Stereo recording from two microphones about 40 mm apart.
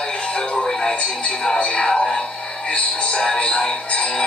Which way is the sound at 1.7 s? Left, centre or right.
Centre.